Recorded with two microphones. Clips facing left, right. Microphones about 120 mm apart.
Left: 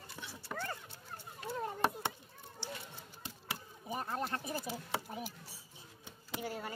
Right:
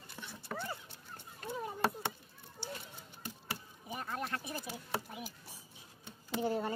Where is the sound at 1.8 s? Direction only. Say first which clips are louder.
Right 1 dB; 15° left (ahead or behind).